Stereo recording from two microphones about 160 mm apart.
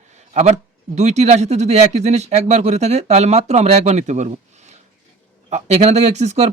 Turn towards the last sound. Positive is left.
turn(degrees=-45)  # may be behind; listen again after turning